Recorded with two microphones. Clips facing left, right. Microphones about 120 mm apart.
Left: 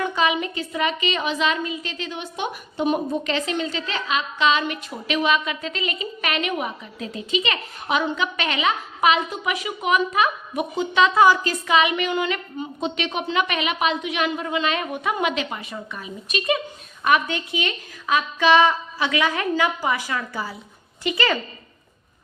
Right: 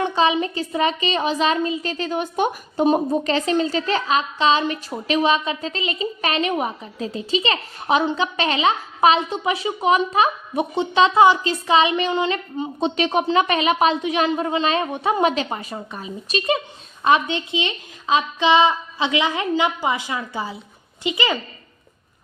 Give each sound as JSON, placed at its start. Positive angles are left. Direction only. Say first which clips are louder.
{"t": 0.0, "sound": "a woman's voice", "louder": "right 3 dB", "side_deg": -30}